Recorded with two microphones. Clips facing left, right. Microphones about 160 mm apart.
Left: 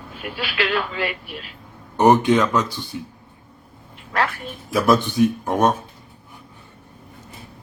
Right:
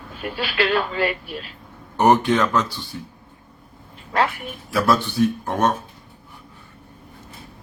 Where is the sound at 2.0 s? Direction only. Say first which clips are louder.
Left 2 dB; 15° left (ahead or behind).